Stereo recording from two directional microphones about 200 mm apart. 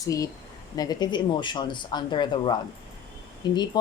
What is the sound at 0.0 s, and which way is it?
A woman's voice, 15° left (ahead or behind).